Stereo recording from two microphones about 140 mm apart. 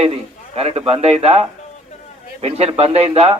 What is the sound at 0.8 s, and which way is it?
Speech, 40° right (ahead or behind).